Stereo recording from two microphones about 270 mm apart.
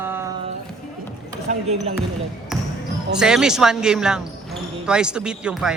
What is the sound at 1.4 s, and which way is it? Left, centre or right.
Speech, right.